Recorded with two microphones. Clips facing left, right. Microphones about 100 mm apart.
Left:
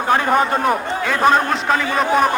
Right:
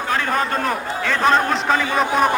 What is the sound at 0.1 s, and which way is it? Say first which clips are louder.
A man's voice: left 5 dB; 20° left (ahead or behind).